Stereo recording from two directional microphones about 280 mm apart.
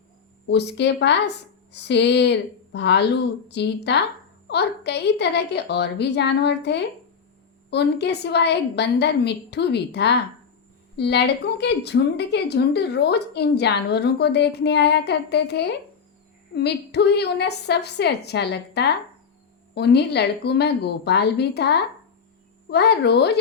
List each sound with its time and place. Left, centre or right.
0.4 s a woman's voice: left